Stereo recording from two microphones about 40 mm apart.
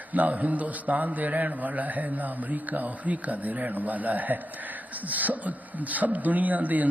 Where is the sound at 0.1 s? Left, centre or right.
Right.